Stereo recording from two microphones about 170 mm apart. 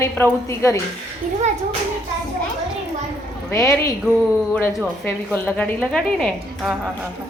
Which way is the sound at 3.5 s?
20° left (ahead or behind).